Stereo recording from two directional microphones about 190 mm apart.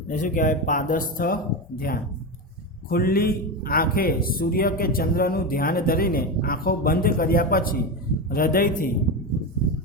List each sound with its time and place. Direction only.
0.1 s a man's voice: 40° left (ahead or behind)